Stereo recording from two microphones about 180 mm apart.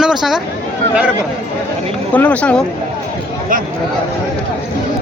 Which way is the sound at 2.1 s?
10° left (ahead or behind).